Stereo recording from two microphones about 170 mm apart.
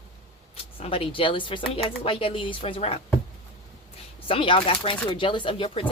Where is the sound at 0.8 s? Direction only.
35° left (ahead or behind).